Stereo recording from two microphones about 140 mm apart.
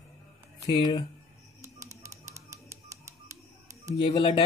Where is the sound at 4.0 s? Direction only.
40° left (ahead or behind).